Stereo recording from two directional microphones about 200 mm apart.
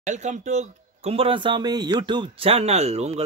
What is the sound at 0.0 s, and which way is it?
Speech, 35° right (ahead or behind).